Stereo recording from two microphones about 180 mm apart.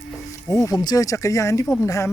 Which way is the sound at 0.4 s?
20° left (ahead or behind).